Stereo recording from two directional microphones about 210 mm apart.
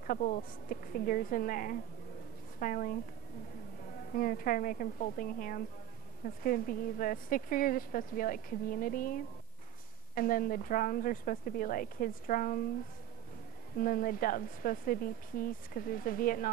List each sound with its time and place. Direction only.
0.0 s speech: 40° left (ahead or behind)
13.7 s speech: 40° left (ahead or behind)